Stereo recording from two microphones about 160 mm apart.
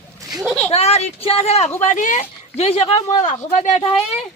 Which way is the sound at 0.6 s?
40° left (ahead or behind).